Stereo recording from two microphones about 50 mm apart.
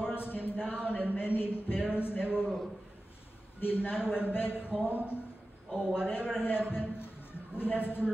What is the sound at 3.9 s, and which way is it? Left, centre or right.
Speech, centre.